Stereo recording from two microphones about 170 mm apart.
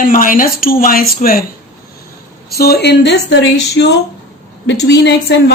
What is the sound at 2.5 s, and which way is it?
A woman's voice, 65° left (ahead or behind).